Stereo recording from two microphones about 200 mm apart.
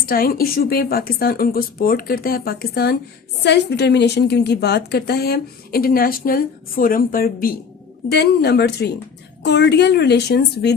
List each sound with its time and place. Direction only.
0.0 s a woman's voice: 45° left (ahead or behind)